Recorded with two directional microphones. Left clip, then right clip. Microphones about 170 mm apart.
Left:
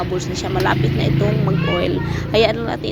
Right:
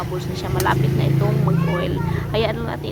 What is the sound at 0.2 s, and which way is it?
Speech, 20° left (ahead or behind).